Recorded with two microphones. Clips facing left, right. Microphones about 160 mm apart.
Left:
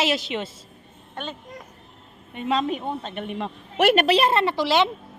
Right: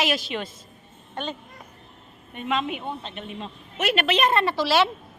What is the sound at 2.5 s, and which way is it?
Speech, 35° left (ahead or behind).